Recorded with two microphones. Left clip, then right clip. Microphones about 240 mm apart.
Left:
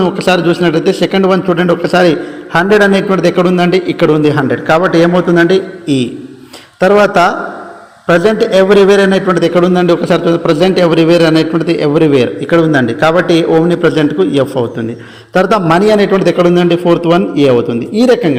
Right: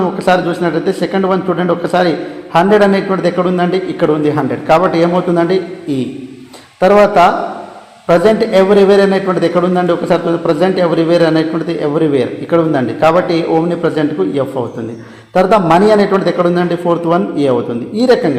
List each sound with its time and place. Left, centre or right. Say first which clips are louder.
0.0 s a man's voice: left 2 dB; left
6.7 s a man's voice: even; left